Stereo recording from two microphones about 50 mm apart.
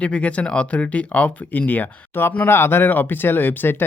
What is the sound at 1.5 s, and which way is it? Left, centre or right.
Speech, left.